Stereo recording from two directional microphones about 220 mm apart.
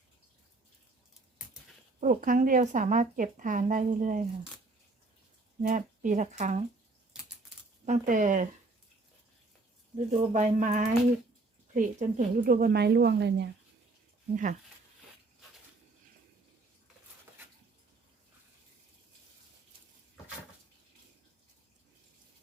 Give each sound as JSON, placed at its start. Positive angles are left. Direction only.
{"t": 2.0, "sound": "speech", "side_deg": -35}
{"t": 5.6, "sound": "speech", "side_deg": -35}
{"t": 7.9, "sound": "speech", "side_deg": -35}
{"t": 10.1, "sound": "speech", "side_deg": -35}
{"t": 14.3, "sound": "speech", "side_deg": -35}